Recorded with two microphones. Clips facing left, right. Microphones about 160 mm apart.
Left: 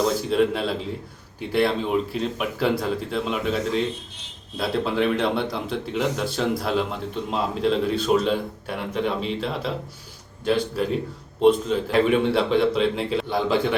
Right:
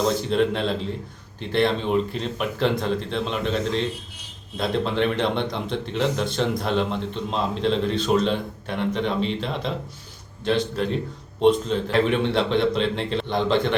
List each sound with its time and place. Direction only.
0.2 s a man's voice: 5° left (ahead or behind)